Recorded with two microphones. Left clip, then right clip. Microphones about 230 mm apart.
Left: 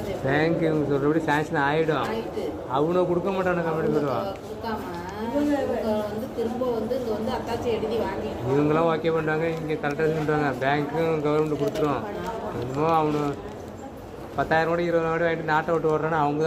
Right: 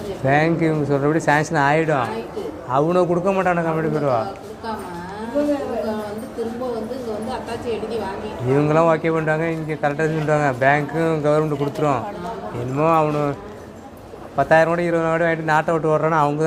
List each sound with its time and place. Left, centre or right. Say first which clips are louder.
0.3 s speech: right 5 dB; right
8.7 s a man's voice: right 8 dB; right
14.3 s a man's voice: right 7 dB; right